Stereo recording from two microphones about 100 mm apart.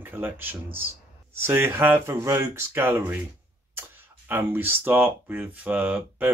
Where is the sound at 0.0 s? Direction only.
20° right (ahead or behind).